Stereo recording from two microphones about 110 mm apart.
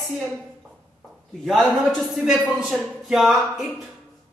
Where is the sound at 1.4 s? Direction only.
Centre (ahead or behind).